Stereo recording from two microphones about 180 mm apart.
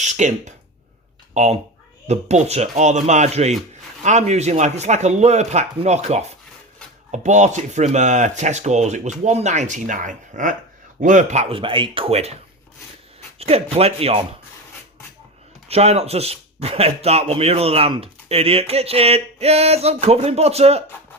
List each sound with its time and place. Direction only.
0.0 s speech: 40° right (ahead or behind)
13.4 s speech: 35° right (ahead or behind)
15.7 s speech: 35° right (ahead or behind)